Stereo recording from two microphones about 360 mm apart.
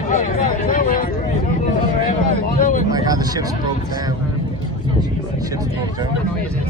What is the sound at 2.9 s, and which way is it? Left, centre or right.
Vehicle, centre.